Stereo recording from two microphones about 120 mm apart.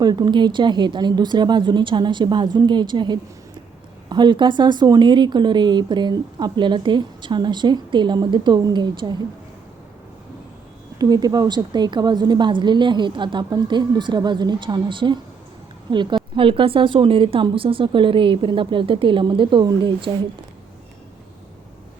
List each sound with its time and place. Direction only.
0.0 s speech: 35° right (ahead or behind)
10.9 s a woman's voice: 35° right (ahead or behind)